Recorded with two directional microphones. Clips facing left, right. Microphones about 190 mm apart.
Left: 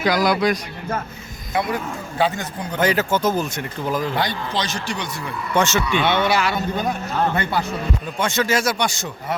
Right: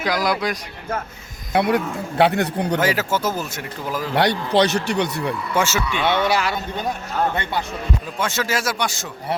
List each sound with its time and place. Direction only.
0.0 s speech: centre (ahead or behind)
1.5 s speech: 65° right (ahead or behind)
2.8 s speech: 5° right (ahead or behind)
4.1 s a man's voice: 70° right (ahead or behind)
5.5 s speech: 5° right (ahead or behind)
6.0 s speech: 35° right (ahead or behind)
8.2 s speech: 5° right (ahead or behind)